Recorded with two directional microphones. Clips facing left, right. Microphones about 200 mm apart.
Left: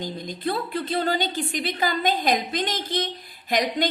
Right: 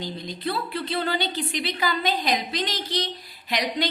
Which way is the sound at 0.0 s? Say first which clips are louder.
Left 2 dB; 45° left (ahead or behind).